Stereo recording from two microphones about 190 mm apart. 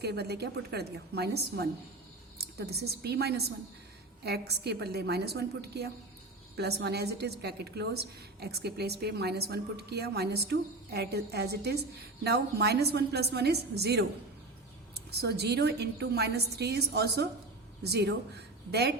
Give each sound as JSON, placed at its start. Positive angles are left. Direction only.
{"t": 0.0, "sound": "a woman's voice", "side_deg": -60}
{"t": 15.2, "sound": "a woman's voice", "side_deg": -60}